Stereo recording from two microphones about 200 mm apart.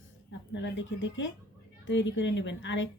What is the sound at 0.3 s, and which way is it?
A woman's voice, 65° left (ahead or behind).